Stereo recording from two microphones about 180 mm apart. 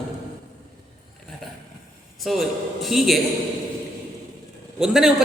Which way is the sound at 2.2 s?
Centre (ahead or behind).